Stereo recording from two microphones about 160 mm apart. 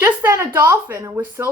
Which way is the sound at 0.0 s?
15° right (ahead or behind).